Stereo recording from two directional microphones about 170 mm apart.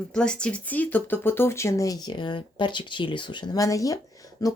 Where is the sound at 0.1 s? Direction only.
5° left (ahead or behind).